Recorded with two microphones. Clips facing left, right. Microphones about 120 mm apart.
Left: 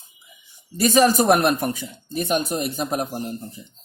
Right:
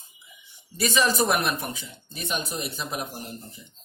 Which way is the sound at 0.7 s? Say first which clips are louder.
Left 7 dB; 45° left (ahead or behind).